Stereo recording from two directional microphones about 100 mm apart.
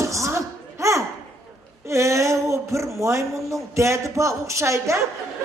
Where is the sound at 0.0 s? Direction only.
30° right (ahead or behind).